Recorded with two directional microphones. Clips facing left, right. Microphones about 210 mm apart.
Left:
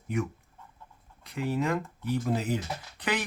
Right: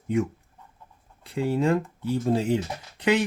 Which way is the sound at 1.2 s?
30° right (ahead or behind).